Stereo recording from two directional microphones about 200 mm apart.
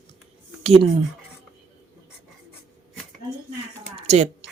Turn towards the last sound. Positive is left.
turn(degrees=-30)  # may be behind; listen again after turning